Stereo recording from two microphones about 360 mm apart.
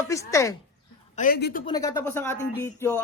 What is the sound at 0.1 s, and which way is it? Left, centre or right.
Speech, centre.